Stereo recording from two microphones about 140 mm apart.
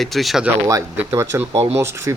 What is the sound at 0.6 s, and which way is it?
Speech, 20° right (ahead or behind).